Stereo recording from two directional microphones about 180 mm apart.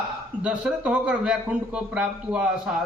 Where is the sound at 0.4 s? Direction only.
5° right (ahead or behind).